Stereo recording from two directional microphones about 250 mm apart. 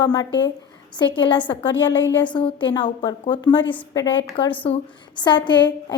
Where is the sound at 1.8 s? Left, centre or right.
Left.